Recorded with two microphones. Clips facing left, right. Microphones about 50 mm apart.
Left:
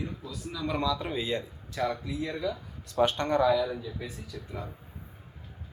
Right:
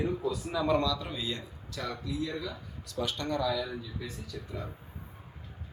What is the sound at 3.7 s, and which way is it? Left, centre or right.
Speech, centre.